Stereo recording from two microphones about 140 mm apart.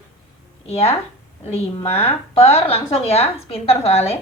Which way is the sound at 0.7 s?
45° left (ahead or behind).